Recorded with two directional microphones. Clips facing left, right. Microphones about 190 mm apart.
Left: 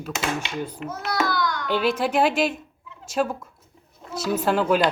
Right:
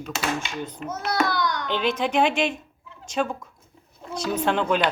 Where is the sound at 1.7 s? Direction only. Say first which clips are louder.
Left 4 dB; 5° left (ahead or behind).